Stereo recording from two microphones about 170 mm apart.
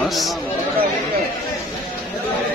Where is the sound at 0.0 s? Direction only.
Centre (ahead or behind).